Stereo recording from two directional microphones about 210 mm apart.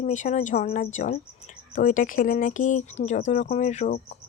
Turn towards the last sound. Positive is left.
turn(degrees=35)  # may be behind; listen again after turning